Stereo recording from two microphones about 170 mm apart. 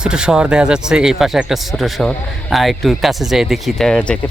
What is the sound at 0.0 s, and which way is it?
Speech, 5° right (ahead or behind).